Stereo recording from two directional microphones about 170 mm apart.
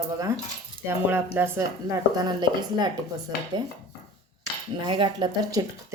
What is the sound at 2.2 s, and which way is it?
Speech, 25° right (ahead or behind).